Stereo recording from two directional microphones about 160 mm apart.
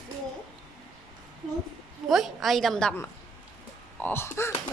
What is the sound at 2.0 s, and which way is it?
Speech, centre (ahead or behind).